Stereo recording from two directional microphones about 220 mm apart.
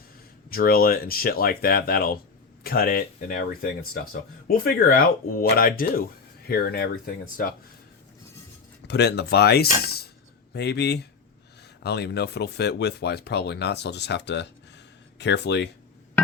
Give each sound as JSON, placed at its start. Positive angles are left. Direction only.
{"t": 0.5, "sound": "speech", "side_deg": 40}
{"t": 8.9, "sound": "speech", "side_deg": 50}